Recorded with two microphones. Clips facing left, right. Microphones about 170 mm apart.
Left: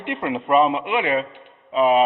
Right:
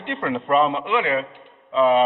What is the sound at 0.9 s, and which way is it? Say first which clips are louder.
A man's voice: even; 20° left (ahead or behind).